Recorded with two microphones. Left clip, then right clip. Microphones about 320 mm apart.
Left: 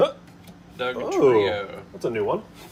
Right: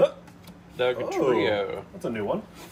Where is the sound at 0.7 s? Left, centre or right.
Centre.